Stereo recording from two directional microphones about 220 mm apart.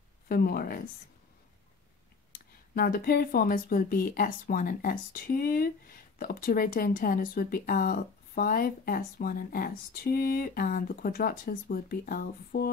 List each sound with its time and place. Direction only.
0.3 s speech: 45° left (ahead or behind)
2.7 s a woman's voice: 45° left (ahead or behind)